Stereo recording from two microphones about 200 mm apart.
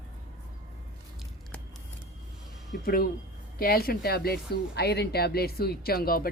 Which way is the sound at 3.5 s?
50° left (ahead or behind).